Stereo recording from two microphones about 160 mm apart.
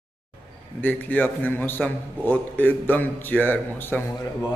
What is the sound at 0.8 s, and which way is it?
A man's voice, 10° left (ahead or behind).